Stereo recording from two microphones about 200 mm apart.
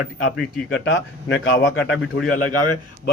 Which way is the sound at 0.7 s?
70° left (ahead or behind).